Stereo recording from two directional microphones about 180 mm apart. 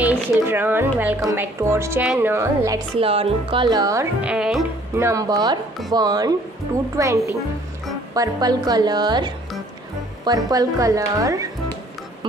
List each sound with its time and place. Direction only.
0.0 s speech: 10° right (ahead or behind)
3.0 s speech: 30° right (ahead or behind); by 4.6 s 5° right (ahead or behind)
4.9 s speech: 15° right (ahead or behind)